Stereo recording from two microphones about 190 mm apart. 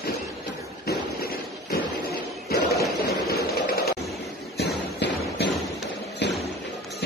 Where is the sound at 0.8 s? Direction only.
50° left (ahead or behind).